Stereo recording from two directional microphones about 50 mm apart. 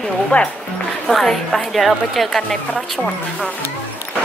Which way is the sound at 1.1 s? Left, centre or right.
Centre.